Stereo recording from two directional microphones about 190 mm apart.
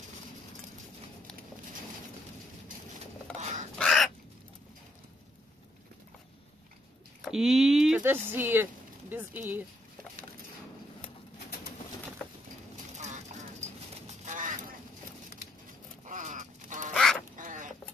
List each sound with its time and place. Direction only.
3.7 s crow: centre (ahead or behind)
7.2 s speech: centre (ahead or behind)
12.9 s duck: 35° right (ahead or behind)
16.1 s a sound: 40° right (ahead or behind)
16.9 s duck: centre (ahead or behind)
17.4 s bird: 45° right (ahead or behind)